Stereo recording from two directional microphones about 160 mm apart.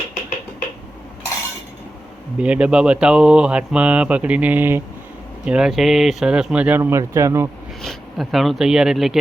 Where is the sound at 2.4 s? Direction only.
5° right (ahead or behind).